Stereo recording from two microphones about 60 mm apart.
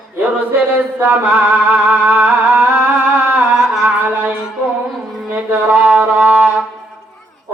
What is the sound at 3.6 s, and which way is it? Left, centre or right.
Singing, centre.